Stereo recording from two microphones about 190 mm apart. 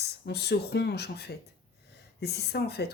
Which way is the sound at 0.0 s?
60° left (ahead or behind).